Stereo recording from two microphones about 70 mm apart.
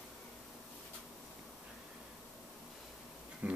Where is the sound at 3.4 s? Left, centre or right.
Centre.